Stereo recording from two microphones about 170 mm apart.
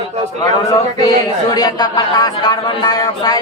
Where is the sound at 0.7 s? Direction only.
20° left (ahead or behind).